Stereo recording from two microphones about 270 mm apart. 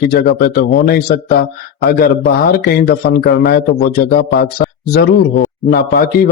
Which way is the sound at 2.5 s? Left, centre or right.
Left.